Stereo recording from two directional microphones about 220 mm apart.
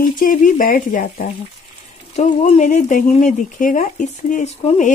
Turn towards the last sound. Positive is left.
turn(degrees=35)  # may be behind; listen again after turning